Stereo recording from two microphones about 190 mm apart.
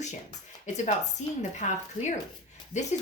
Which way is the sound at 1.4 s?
40° left (ahead or behind).